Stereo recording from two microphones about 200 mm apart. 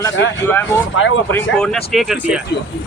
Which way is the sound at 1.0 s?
75° left (ahead or behind).